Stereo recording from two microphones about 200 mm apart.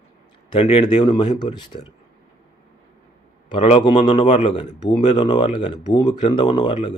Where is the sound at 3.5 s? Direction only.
25° left (ahead or behind).